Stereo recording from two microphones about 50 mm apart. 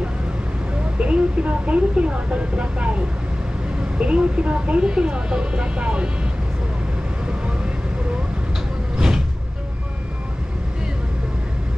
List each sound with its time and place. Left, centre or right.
0.9 s speech: right
4.0 s speech: right
8.9 s vehicle: centre